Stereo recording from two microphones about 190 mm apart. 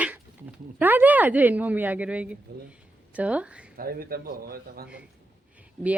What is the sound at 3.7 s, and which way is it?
A man's voice, 50° right (ahead or behind).